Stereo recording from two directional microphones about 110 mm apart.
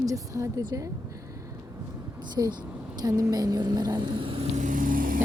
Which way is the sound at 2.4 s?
30° right (ahead or behind).